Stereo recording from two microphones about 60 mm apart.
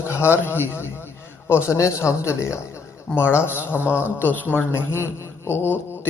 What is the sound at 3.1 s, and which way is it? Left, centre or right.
Speech, left.